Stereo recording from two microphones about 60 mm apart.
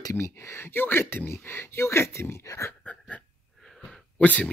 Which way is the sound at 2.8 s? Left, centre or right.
Left.